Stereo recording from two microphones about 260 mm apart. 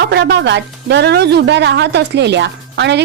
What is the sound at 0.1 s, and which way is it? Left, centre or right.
A woman's voice, right.